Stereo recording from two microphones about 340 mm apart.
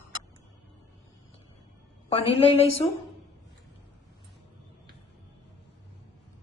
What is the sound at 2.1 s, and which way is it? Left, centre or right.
Speech, centre.